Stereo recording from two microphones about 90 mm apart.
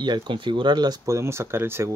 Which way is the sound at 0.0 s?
60° right (ahead or behind).